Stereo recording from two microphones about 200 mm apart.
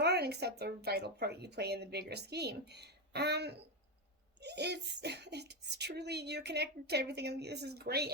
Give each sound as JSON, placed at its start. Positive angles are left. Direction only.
{"t": 0.0, "sound": "a child's voice", "side_deg": -55}